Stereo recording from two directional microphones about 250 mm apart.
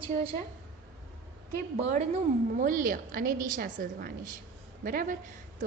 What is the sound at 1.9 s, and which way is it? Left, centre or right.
A woman's voice, right.